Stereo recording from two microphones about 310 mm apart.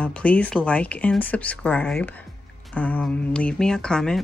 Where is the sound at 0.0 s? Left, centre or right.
Centre.